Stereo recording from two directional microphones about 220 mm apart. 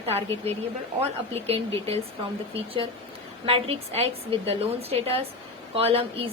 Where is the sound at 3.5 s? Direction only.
25° right (ahead or behind).